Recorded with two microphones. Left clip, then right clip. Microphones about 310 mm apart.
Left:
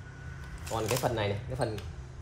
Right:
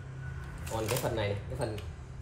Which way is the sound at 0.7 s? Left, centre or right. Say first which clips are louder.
Left 2 dB; centre.